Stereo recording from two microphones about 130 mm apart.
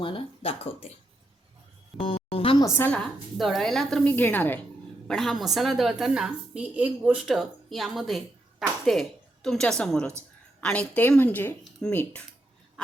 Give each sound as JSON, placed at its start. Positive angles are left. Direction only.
{"t": 0.0, "sound": "speech", "side_deg": 45}
{"t": 2.0, "sound": "music", "side_deg": 45}
{"t": 2.6, "sound": "a woman's voice", "side_deg": 20}
{"t": 2.9, "sound": "a woman's voice", "side_deg": 5}
{"t": 5.0, "sound": "a woman's voice", "side_deg": 5}